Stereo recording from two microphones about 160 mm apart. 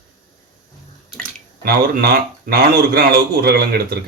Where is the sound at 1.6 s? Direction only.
75° right (ahead or behind).